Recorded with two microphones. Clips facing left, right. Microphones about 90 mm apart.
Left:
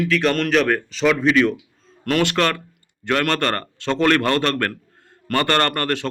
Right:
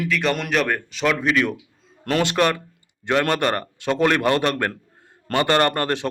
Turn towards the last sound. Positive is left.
turn(degrees=-20)  # may be behind; listen again after turning